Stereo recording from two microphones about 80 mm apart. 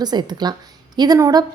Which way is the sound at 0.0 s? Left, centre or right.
Right.